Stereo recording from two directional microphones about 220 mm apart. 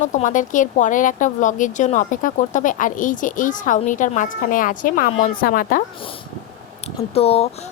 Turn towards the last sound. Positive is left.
turn(degrees=25)  # may be behind; listen again after turning